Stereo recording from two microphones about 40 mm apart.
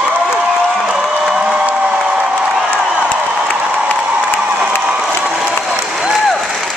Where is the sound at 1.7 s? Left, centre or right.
Right.